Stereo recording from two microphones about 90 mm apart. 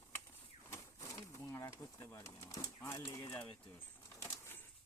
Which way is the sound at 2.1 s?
35° left (ahead or behind).